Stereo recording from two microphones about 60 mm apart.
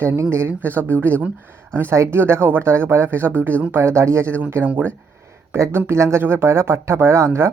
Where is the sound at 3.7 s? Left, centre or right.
Right.